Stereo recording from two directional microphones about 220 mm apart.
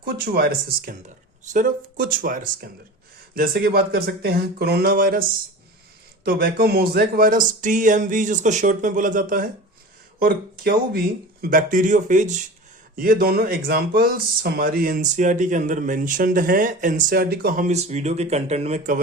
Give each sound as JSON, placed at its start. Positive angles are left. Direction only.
{"t": 0.0, "sound": "speech", "side_deg": -45}
{"t": 6.2, "sound": "speech", "side_deg": -45}